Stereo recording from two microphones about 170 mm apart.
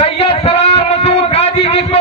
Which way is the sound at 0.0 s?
35° left (ahead or behind).